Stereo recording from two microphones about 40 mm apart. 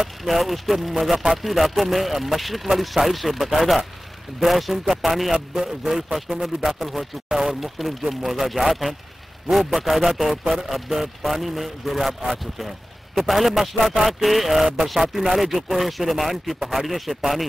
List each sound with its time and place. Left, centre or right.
0.0 s a man's voice: centre